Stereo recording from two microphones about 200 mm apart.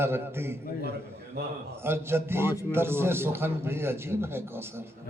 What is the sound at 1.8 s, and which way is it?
A man's voice, 10° right (ahead or behind).